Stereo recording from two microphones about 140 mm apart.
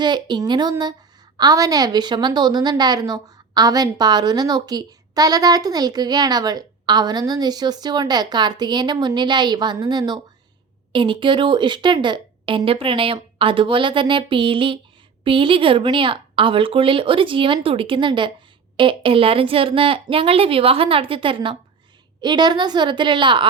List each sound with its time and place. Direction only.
0.0 s a woman's voice: 30° right (ahead or behind)